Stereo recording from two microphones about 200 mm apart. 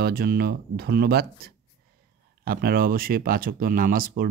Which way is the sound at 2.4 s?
50° right (ahead or behind).